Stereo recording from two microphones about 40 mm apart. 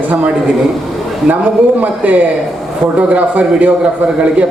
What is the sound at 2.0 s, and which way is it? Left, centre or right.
Speech, right.